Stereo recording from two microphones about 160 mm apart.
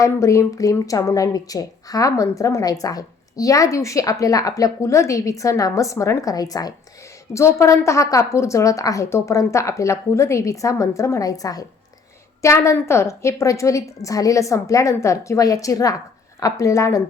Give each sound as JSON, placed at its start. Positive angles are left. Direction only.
{"t": 0.0, "sound": "a woman's voice", "side_deg": 20}